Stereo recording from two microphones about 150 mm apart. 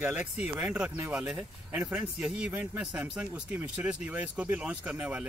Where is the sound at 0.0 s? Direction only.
10° right (ahead or behind).